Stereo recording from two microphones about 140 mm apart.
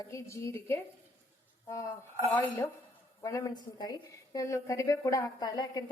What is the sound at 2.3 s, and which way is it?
A woman's voice, 20° left (ahead or behind).